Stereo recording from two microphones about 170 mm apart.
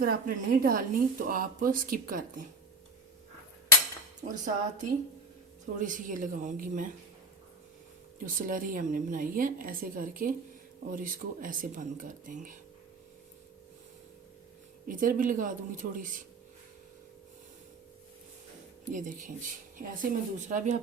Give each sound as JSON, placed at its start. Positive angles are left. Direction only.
{"t": 0.0, "sound": "speech", "side_deg": -60}
{"t": 4.2, "sound": "a woman's voice", "side_deg": -45}
{"t": 8.2, "sound": "a woman's voice", "side_deg": -50}
{"t": 14.8, "sound": "a woman's voice", "side_deg": -55}
{"t": 18.9, "sound": "a woman's voice", "side_deg": -50}